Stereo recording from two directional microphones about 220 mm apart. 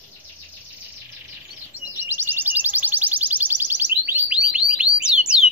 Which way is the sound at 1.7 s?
10° right (ahead or behind).